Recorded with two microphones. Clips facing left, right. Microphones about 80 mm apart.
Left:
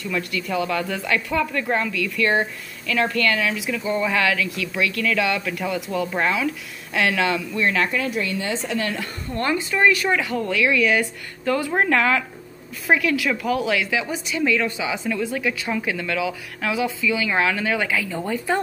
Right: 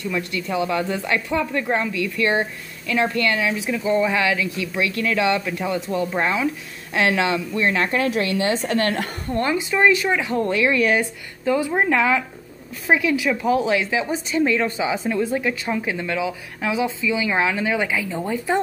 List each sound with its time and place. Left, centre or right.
0.0 s a woman's voice: right
3.8 s a woman's voice: centre
7.9 s a woman's voice: right
9.4 s a woman's voice: centre
10.4 s a woman's voice: right
11.0 s a woman's voice: centre